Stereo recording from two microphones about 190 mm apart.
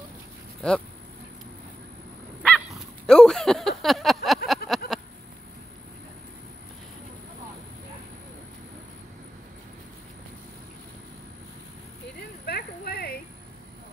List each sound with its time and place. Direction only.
0.6 s speech: 5° left (ahead or behind)
2.4 s dog: 5° left (ahead or behind)
4.6 s bleat: centre (ahead or behind)
12.4 s a sound: 55° left (ahead or behind)